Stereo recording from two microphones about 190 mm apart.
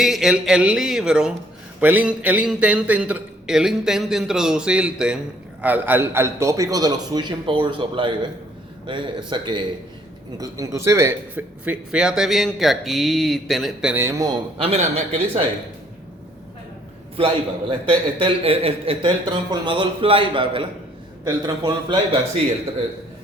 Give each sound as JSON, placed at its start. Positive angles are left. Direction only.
{"t": 0.0, "sound": "a man's voice", "side_deg": 0}
{"t": 13.9, "sound": "a man's voice", "side_deg": -15}
{"t": 14.6, "sound": "a man's voice", "side_deg": -35}
{"t": 17.2, "sound": "a man's voice", "side_deg": -30}